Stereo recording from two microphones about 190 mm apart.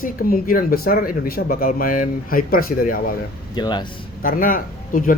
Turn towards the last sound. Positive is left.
turn(degrees=45)  # may be behind; listen again after turning